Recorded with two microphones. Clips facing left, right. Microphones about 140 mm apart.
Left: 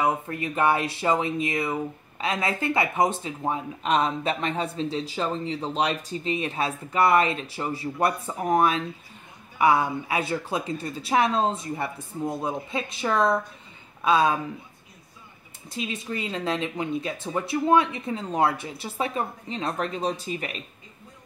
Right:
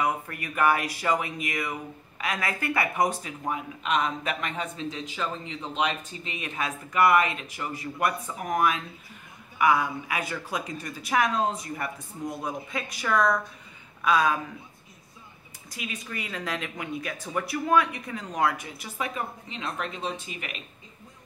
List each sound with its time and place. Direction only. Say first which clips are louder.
0.0 s speech: left 3 dB; 25° left (ahead or behind)
15.7 s speech: left 6 dB; 25° left (ahead or behind)